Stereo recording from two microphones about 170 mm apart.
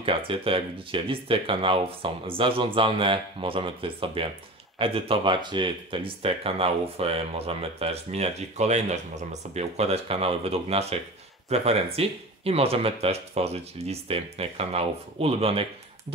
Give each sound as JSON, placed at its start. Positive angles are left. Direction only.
{"t": 0.0, "sound": "speech", "side_deg": -30}